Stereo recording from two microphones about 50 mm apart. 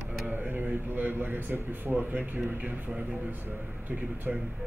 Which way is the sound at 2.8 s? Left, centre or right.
Right.